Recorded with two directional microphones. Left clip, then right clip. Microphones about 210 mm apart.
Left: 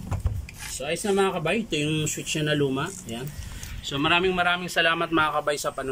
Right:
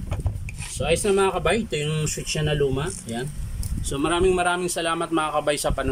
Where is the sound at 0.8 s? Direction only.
10° right (ahead or behind).